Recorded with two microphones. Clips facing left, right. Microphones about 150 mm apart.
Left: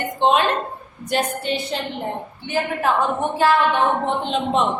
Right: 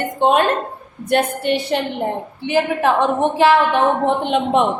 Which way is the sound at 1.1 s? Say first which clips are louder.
Right 5 dB; 60° right (ahead or behind).